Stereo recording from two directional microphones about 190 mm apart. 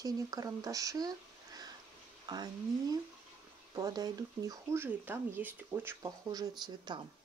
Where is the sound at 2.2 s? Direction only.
20° right (ahead or behind).